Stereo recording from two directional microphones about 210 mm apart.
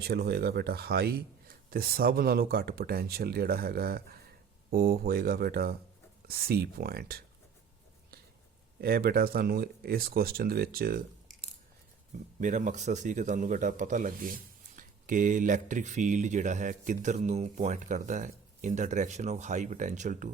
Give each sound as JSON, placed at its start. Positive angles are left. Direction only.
{"t": 0.0, "sound": "speech", "side_deg": -50}
{"t": 8.8, "sound": "speech", "side_deg": -45}
{"t": 12.4, "sound": "speech", "side_deg": -35}